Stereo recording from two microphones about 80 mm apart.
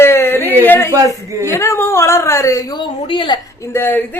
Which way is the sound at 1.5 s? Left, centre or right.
Left.